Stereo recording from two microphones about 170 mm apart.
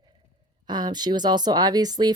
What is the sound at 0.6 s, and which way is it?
Speech, 25° right (ahead or behind).